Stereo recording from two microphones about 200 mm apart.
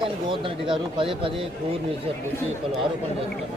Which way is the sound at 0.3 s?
25° right (ahead or behind).